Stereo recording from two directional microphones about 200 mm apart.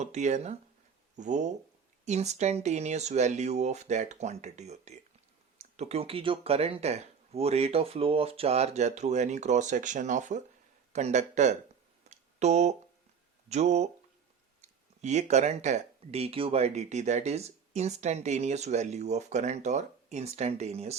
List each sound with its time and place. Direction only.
0.0 s speech: 35° right (ahead or behind)
12.0 s a sound: 35° right (ahead or behind)
13.5 s speech: 35° right (ahead or behind)